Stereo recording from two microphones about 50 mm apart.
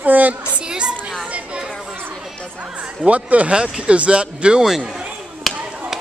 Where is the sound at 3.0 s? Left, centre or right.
Right.